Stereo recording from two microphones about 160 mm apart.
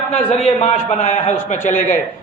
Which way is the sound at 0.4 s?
45° left (ahead or behind).